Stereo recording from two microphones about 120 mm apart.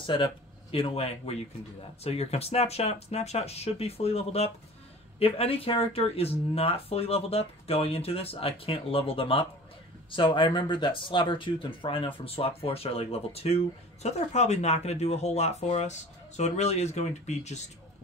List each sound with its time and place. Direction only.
0.0 s speech: 45° left (ahead or behind); by 17.6 s 70° left (ahead or behind)